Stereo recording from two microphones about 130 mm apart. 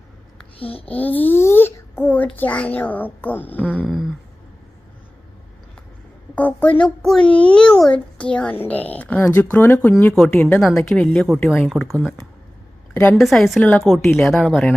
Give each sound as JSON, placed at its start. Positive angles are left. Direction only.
{"t": 0.6, "sound": "child singing", "side_deg": 45}
{"t": 0.9, "sound": "a child's voice", "side_deg": 15}
{"t": 3.8, "sound": "a sound", "side_deg": 0}
{"t": 6.3, "sound": "a child's voice", "side_deg": 10}
{"t": 10.4, "sound": "a woman's voice", "side_deg": 5}
{"t": 12.9, "sound": "a woman's voice", "side_deg": 15}
{"t": 13.1, "sound": "a woman's voice", "side_deg": 0}